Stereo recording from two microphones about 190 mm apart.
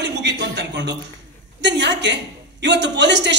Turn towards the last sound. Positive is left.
turn(degrees=-65)  # may be behind; listen again after turning